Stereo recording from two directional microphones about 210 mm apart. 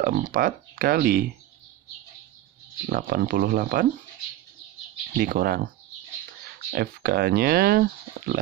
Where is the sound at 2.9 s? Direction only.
45° right (ahead or behind).